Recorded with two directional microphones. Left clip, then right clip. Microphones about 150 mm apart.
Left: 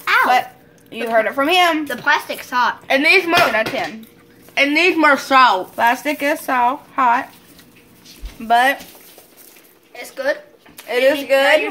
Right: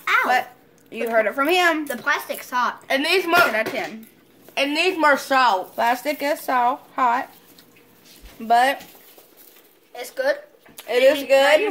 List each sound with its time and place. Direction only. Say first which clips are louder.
0.0 s a sound: left 4 dB; 5° right (ahead or behind)
0.3 s a sound: left 5 dB; 25° right (ahead or behind)
1.0 s a woman's voice: left 3 dB; 25° right (ahead or behind)
1.9 s speech: left 6 dB; 10° right (ahead or behind)
2.9 s a woman's voice: left 6 dB; 25° right (ahead or behind)
8.5 s a woman's voice: left 3 dB; 30° right (ahead or behind)
9.9 s a woman's voice: left 1 dB; 25° right (ahead or behind)
10.8 s speech: left 1 dB; 40° right (ahead or behind)